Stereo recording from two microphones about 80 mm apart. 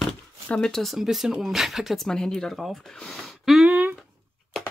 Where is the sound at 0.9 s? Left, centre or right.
Centre.